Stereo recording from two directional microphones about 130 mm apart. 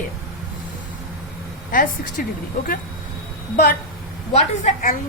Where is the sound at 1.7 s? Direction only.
90° left.